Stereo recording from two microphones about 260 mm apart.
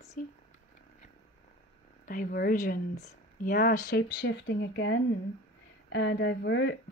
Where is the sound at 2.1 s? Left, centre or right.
Left.